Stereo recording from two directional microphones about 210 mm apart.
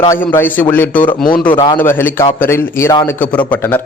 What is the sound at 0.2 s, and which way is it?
A man's voice, 10° left (ahead or behind).